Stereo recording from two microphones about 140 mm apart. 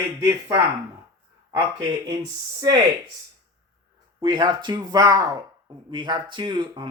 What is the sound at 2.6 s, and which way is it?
Speech, 35° right (ahead or behind).